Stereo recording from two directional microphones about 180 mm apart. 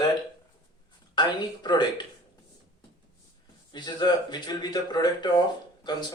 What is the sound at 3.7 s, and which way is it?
Speech, 25° left (ahead or behind).